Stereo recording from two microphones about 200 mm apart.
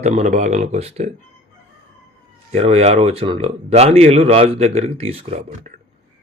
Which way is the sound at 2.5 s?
30° right (ahead or behind).